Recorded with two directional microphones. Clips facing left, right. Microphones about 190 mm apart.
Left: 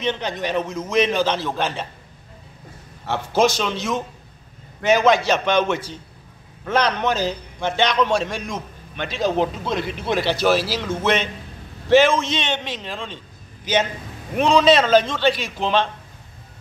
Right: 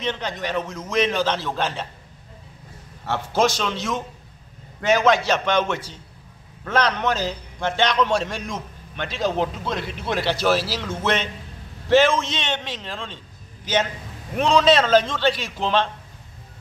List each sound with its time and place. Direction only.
0.0 s a man's voice: 20° left (ahead or behind)
3.6 s a man's voice: 15° left (ahead or behind)
14.3 s a man's voice: 15° left (ahead or behind)